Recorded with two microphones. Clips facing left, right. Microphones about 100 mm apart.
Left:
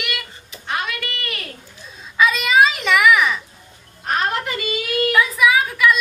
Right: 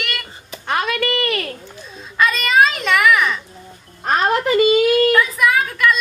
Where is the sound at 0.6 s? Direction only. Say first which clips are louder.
Right 6 dB; 55° right (ahead or behind).